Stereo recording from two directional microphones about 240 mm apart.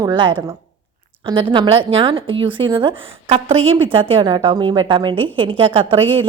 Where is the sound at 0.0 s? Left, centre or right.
Centre.